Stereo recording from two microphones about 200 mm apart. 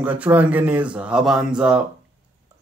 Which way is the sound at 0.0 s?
5° right (ahead or behind).